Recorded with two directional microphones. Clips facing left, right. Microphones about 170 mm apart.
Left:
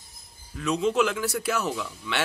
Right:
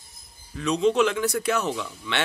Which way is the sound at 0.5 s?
5° left (ahead or behind).